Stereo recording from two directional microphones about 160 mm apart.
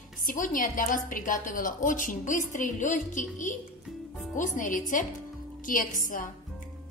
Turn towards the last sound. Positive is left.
turn(degrees=55)  # may be behind; listen again after turning